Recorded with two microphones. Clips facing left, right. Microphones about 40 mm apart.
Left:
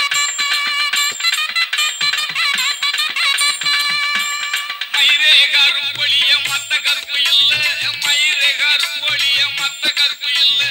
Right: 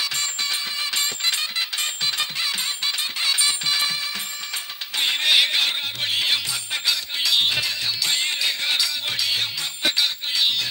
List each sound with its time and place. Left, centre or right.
0.0 s music: left